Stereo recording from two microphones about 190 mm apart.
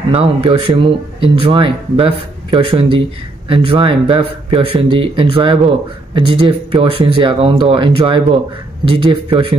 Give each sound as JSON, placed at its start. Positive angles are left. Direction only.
{"t": 0.1, "sound": "speech", "side_deg": -30}